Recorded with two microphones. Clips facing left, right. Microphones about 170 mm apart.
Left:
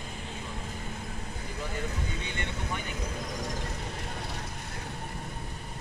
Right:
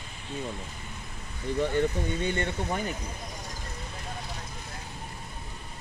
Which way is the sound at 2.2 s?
50° right (ahead or behind).